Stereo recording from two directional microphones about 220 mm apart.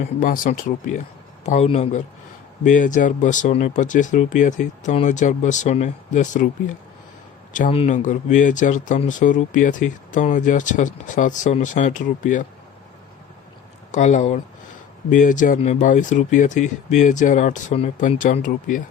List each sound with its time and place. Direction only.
0.0 s speech: 40° left (ahead or behind)
7.5 s speech: 30° left (ahead or behind)
13.9 s speech: 35° left (ahead or behind)